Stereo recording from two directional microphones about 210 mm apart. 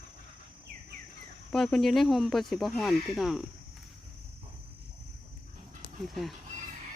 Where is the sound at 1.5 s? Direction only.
5° left (ahead or behind).